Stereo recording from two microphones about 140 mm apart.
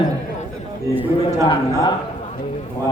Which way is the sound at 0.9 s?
25° right (ahead or behind).